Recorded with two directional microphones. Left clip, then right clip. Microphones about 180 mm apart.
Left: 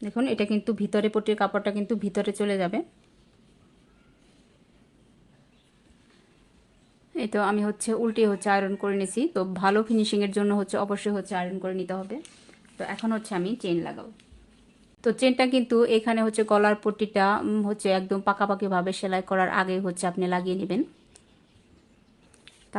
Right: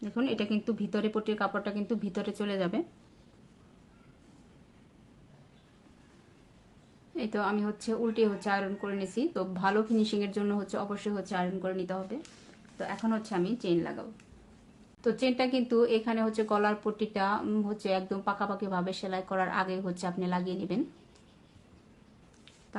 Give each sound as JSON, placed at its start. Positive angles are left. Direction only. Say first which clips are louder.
{"t": 0.0, "sound": "speech", "louder": "left 5 dB", "side_deg": 35}
{"t": 7.2, "sound": "speech", "louder": "left 6 dB", "side_deg": 40}
{"t": 13.8, "sound": "a woman's voice", "louder": "left 2 dB", "side_deg": 20}
{"t": 15.0, "sound": "speech", "louder": "left 6 dB", "side_deg": 45}